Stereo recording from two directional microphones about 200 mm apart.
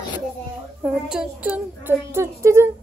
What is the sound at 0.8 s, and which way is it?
A woman's voice, 5° right (ahead or behind).